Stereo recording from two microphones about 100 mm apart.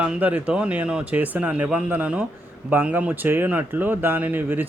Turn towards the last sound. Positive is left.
turn(degrees=-20)  # may be behind; listen again after turning